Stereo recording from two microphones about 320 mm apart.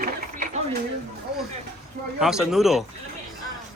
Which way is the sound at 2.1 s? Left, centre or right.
Centre.